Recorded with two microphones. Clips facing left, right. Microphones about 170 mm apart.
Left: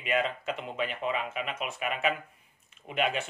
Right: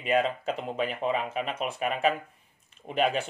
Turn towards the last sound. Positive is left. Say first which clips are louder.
# right 3 dB
turn(degrees=-35)  # may be behind; listen again after turning